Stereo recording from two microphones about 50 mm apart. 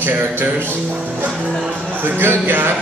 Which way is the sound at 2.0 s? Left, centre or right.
Right.